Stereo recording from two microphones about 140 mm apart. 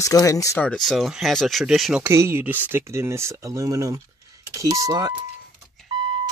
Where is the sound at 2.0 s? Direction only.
20° right (ahead or behind).